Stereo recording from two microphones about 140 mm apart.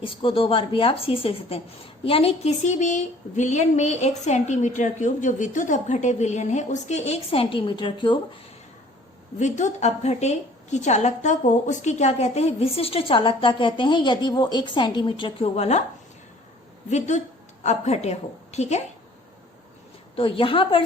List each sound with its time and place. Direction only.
0.0 s a woman's voice: 40° left (ahead or behind)
9.4 s a woman's voice: 60° left (ahead or behind); by 15.4 s 35° left (ahead or behind)
15.5 s a woman's voice: 50° left (ahead or behind)
16.9 s a woman's voice: 55° left (ahead or behind)
20.1 s speech: 40° left (ahead or behind)